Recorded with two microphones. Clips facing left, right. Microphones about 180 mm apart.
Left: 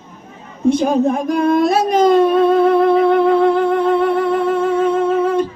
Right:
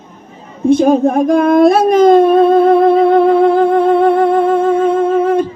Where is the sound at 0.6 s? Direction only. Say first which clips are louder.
Right 4 dB; 55° right (ahead or behind).